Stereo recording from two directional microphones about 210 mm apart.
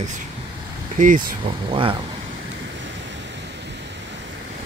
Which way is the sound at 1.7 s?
25° right (ahead or behind).